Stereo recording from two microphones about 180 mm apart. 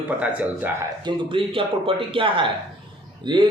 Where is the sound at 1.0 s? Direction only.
30° right (ahead or behind).